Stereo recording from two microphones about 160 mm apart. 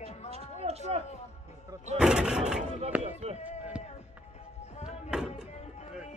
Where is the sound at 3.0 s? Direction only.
40° right (ahead or behind).